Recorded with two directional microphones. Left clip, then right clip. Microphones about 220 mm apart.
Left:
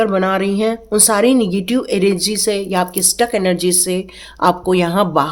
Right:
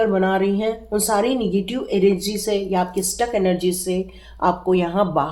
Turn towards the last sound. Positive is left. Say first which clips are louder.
# left 5 dB
turn(degrees=45)  # may be behind; listen again after turning